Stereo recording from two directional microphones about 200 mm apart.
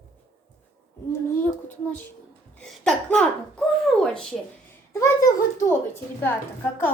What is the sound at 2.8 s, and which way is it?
Speech, 5° left (ahead or behind).